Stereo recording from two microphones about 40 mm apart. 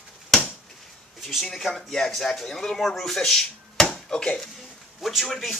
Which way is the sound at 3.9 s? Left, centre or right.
Left.